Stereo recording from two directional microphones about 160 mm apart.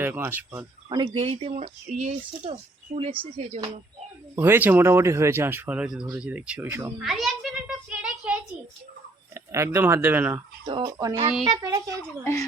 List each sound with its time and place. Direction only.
0.0 s speech: 15° right (ahead or behind)
0.9 s speech: 30° right (ahead or behind)
4.4 s speech: 15° right (ahead or behind)
7.0 s a sound: centre (ahead or behind)
9.3 s speech: 15° right (ahead or behind)
10.7 s speech: 25° right (ahead or behind)
12.2 s a woman's voice: 20° left (ahead or behind)